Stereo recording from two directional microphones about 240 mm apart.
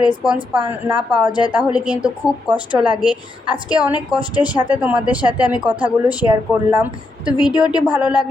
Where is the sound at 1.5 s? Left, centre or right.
Centre.